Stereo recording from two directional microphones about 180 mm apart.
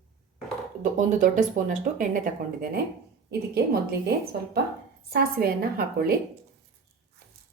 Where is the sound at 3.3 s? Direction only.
60° right (ahead or behind).